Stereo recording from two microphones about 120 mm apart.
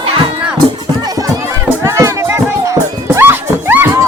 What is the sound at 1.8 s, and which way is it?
Music, 25° right (ahead or behind).